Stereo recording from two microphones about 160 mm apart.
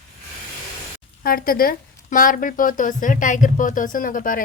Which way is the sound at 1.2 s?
65° left (ahead or behind).